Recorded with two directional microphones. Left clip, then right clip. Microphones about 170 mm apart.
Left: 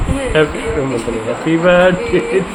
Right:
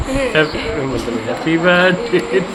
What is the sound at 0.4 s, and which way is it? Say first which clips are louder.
Speech: left 5 dB; 20° left (ahead or behind).